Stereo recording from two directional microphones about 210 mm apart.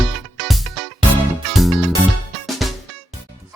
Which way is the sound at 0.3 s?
Centre (ahead or behind).